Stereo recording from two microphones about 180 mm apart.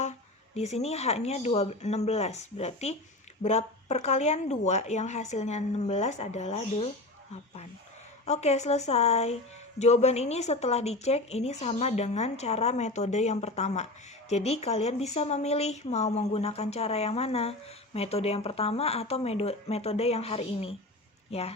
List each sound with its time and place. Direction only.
0.0 s speech: 40° left (ahead or behind)
8.3 s speech: 40° left (ahead or behind)